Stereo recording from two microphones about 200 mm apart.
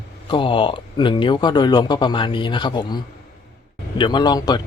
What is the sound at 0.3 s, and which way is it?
Speech, 25° left (ahead or behind).